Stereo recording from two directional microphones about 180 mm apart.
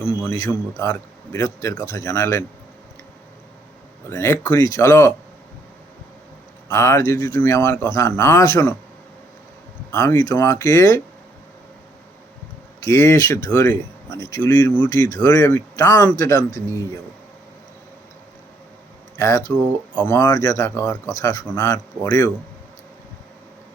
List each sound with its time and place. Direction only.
0.2 s speech: 15° left (ahead or behind)
4.1 s speech: 15° left (ahead or behind)
6.7 s speech: 15° left (ahead or behind)
9.9 s speech: 15° left (ahead or behind)
12.8 s speech: 15° left (ahead or behind)
19.2 s speech: 15° left (ahead or behind)